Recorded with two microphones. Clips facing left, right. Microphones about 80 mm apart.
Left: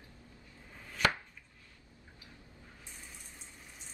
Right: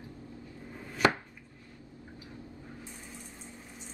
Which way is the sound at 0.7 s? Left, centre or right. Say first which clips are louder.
Right 5 dB; centre.